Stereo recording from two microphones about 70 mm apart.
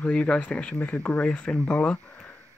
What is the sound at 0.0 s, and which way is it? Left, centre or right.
Speech, centre.